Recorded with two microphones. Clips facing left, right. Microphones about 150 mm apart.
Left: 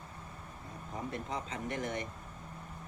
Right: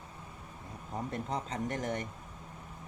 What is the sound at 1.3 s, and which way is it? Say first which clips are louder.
Speech: right 3 dB; 35° right (ahead or behind).